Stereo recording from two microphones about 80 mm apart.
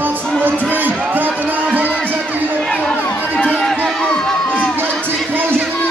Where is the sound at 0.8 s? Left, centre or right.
Right.